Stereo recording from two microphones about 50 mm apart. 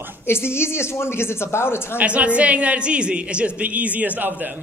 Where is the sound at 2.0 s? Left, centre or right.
Right.